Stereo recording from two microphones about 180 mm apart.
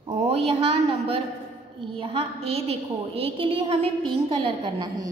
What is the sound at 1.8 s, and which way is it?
A woman's voice, 30° right (ahead or behind).